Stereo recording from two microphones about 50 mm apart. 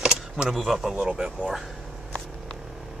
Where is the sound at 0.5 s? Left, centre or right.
Centre.